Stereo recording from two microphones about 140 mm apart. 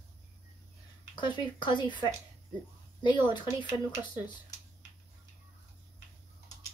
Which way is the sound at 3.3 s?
35° left (ahead or behind).